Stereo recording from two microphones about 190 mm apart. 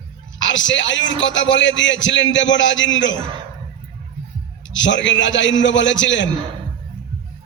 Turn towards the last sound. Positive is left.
turn(degrees=75)  # may be behind; listen again after turning